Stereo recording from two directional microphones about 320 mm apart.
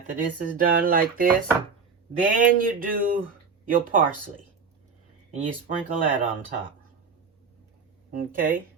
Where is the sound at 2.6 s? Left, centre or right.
Right.